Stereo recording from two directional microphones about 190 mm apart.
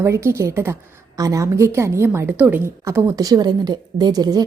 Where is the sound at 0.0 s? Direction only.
15° right (ahead or behind).